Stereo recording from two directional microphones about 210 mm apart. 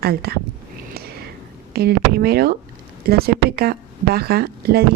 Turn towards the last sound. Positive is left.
turn(degrees=-45)  # may be behind; listen again after turning